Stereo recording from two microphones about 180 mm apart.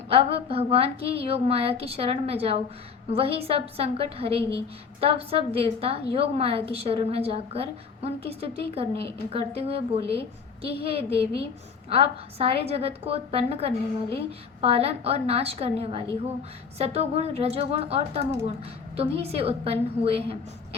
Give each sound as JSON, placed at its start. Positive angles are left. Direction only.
{"t": 0.1, "sound": "a woman's voice", "side_deg": -35}